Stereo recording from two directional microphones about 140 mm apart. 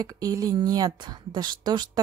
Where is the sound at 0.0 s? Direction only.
25° right (ahead or behind).